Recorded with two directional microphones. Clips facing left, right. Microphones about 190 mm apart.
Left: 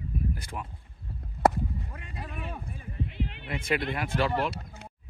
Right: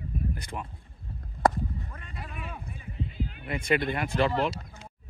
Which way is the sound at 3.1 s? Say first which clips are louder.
Left 1 dB; 75° left (ahead or behind).